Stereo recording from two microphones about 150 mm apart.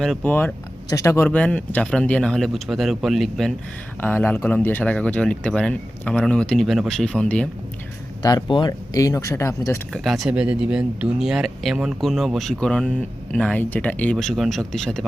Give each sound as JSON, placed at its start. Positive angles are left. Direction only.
{"t": 0.0, "sound": "speech", "side_deg": 5}
{"t": 1.3, "sound": "speech", "side_deg": 10}
{"t": 4.0, "sound": "speech", "side_deg": 10}
{"t": 8.2, "sound": "speech", "side_deg": 25}
{"t": 9.9, "sound": "speech", "side_deg": 0}